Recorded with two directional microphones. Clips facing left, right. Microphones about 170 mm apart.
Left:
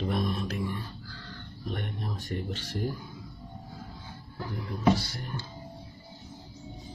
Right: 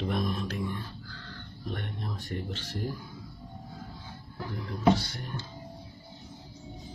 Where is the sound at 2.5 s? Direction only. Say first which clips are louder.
Left 2 dB; 15° left (ahead or behind).